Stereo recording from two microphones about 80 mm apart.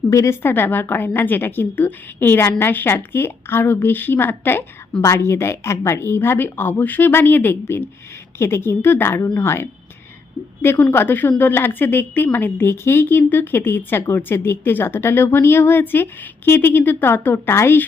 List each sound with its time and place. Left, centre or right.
0.1 s a woman's voice: left
0.4 s a woman's voice: left